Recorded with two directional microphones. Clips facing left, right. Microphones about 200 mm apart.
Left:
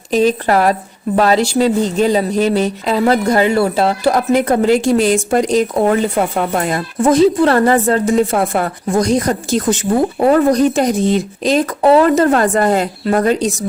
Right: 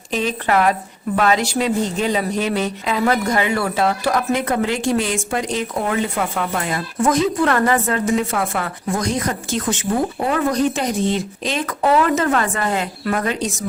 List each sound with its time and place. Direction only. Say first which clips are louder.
0.1 s a woman's voice: left 7 dB; 40° left (ahead or behind)
7.0 s a woman's voice: left 7 dB; 30° left (ahead or behind)